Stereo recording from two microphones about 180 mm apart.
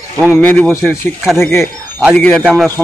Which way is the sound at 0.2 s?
10° left (ahead or behind).